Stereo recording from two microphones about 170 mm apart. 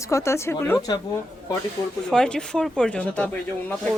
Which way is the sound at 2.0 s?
5° left (ahead or behind).